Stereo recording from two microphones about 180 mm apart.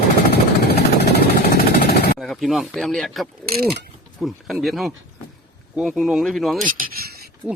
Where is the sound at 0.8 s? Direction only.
60° left (ahead or behind).